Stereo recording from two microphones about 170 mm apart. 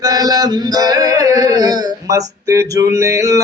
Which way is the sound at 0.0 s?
20° right (ahead or behind).